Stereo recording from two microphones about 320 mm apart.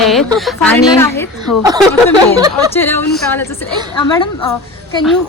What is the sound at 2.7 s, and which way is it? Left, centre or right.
Speech, centre.